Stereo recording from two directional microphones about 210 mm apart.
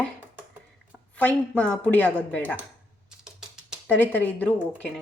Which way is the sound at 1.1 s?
5° left (ahead or behind).